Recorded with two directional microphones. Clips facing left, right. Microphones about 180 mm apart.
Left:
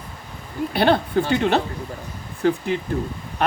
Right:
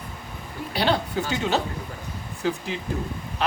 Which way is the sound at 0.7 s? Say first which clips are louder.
Left 5 dB; 55° left (ahead or behind).